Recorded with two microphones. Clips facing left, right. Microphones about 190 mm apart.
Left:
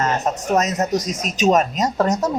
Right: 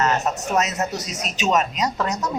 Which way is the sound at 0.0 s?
40° left (ahead or behind).